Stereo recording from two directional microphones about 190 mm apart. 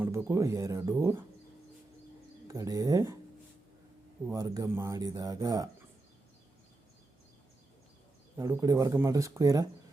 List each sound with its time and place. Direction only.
0.0 s speech: 15° right (ahead or behind)
2.5 s speech: 20° right (ahead or behind)
4.3 s speech: 15° right (ahead or behind)
8.4 s speech: 15° right (ahead or behind)